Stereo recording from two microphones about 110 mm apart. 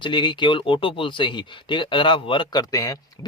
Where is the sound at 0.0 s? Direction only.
45° left (ahead or behind).